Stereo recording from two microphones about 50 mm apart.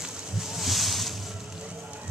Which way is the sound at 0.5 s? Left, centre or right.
Centre.